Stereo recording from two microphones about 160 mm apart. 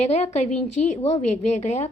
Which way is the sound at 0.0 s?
45° left (ahead or behind).